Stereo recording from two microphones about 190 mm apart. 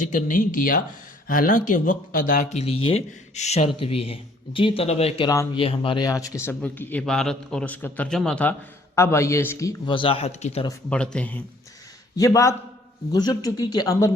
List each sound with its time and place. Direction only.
0.0 s a man's voice: 45° left (ahead or behind)
10.7 s a man's voice: 5° left (ahead or behind)
12.1 s a man's voice: 20° left (ahead or behind)